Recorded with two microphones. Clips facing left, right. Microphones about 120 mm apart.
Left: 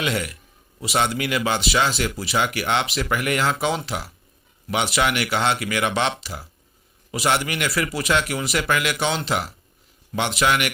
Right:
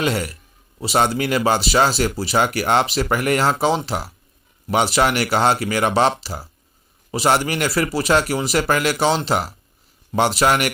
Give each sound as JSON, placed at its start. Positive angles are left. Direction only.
{"t": 0.0, "sound": "speech", "side_deg": -35}